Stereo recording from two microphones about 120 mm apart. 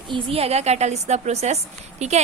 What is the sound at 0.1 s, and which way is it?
A woman's voice, 55° right (ahead or behind).